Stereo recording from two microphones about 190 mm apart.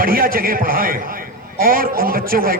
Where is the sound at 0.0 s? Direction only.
50° right (ahead or behind).